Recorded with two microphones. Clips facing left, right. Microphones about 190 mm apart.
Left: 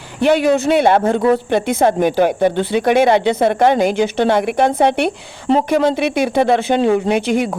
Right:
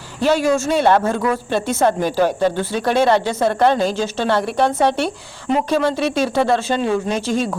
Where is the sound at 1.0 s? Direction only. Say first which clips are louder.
Left 5 dB; 30° left (ahead or behind).